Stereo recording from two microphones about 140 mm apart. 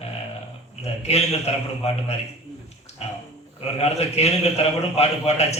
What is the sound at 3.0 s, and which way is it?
A man's voice, 45° left (ahead or behind).